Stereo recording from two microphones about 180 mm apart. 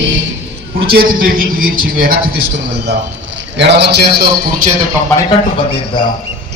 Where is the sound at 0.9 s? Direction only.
55° right (ahead or behind).